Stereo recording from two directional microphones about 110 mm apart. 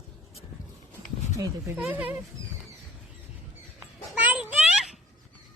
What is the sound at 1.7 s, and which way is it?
Speech, 15° right (ahead or behind).